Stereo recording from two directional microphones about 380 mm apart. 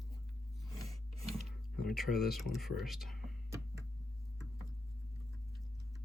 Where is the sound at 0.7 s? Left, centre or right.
Centre.